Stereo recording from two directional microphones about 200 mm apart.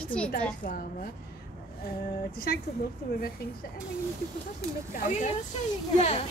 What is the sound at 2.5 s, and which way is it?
Speech, 50° left (ahead or behind).